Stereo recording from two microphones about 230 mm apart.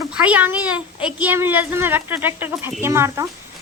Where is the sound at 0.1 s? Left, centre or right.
Centre.